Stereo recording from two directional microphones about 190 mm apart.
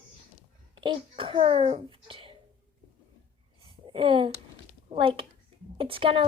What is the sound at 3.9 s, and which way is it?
A woman's voice, 25° right (ahead or behind).